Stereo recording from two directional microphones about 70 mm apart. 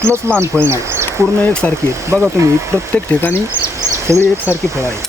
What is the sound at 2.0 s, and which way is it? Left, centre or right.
Speech, right.